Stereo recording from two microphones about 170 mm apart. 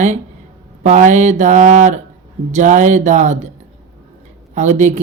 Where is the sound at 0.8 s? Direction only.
45° right (ahead or behind).